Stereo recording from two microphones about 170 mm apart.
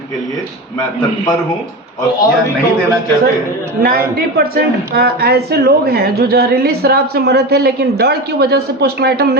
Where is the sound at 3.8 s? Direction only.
60° right (ahead or behind).